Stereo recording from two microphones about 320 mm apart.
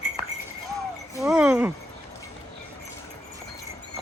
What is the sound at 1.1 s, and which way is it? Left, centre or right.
Speech, centre.